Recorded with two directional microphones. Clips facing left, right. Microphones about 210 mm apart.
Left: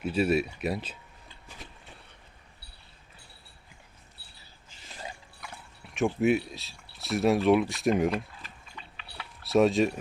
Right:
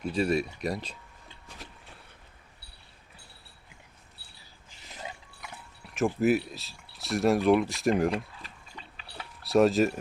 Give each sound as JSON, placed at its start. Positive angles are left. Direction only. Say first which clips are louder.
{"t": 0.0, "sound": "speech", "louder": "left 1 dB", "side_deg": 5}
{"t": 1.5, "sound": "a sound", "louder": "even", "side_deg": 0}
{"t": 4.9, "sound": "a sound", "louder": "even", "side_deg": -20}
{"t": 5.8, "sound": "speech", "louder": "even", "side_deg": 0}
{"t": 8.1, "sound": "mechanisms", "louder": "even", "side_deg": -30}
{"t": 9.4, "sound": "speech", "louder": "even", "side_deg": 0}